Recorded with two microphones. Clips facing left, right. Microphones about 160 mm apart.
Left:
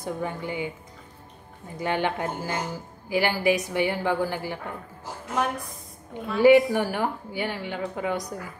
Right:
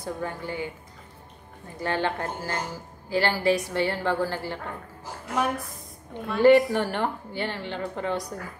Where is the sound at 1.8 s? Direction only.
15° left (ahead or behind).